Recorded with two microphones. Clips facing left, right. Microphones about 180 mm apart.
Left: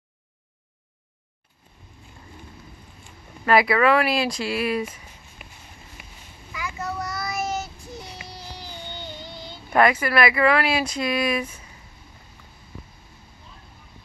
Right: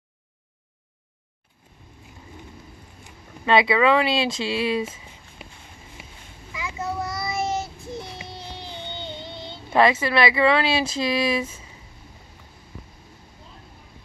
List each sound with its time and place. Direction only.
3.0 s speech: 25° right (ahead or behind)
6.5 s child singing: 25° right (ahead or behind)